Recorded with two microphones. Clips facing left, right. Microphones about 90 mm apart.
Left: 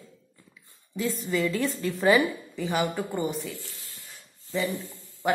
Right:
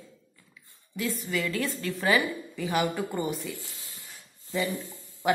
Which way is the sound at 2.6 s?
15° left (ahead or behind).